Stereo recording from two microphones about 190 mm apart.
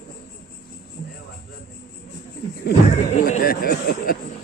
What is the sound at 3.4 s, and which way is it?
Speech, 50° left (ahead or behind).